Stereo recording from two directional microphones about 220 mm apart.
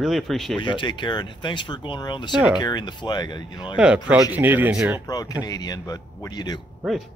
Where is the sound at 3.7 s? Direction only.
5° right (ahead or behind).